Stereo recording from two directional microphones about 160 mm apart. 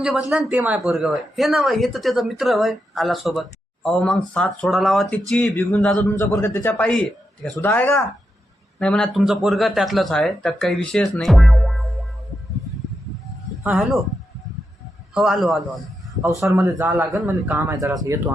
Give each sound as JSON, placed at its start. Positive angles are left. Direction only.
{"t": 0.0, "sound": "a man's voice", "side_deg": -5}
{"t": 13.7, "sound": "speech", "side_deg": 0}
{"t": 15.1, "sound": "a man's voice", "side_deg": -5}
{"t": 16.5, "sound": "a man's voice", "side_deg": -15}